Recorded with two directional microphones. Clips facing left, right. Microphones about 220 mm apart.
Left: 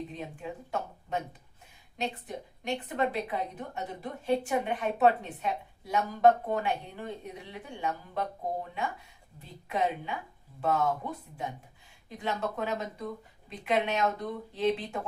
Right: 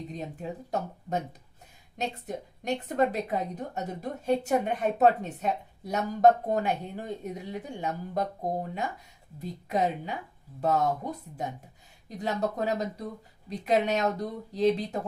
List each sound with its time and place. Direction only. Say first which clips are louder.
0.1 s a woman's voice: right 3 dB; 40° right (ahead or behind)
9.4 s a woman's voice: right 3 dB; 40° right (ahead or behind)